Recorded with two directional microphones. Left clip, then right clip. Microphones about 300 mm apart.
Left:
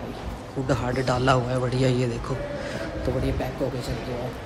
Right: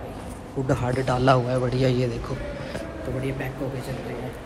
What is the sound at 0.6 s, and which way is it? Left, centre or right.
A man's voice, centre.